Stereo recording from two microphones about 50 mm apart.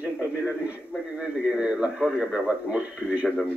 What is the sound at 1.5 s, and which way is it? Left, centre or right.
A man's voice, right.